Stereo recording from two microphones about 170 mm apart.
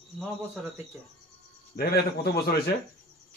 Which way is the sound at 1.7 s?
70° left (ahead or behind).